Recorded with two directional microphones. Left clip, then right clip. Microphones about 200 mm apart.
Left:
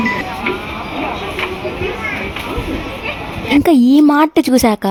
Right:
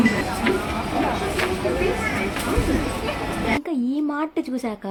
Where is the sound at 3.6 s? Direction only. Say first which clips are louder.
Left 15 dB; 55° left (ahead or behind).